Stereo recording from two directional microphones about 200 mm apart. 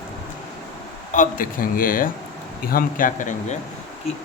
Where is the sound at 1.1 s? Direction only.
40° left (ahead or behind).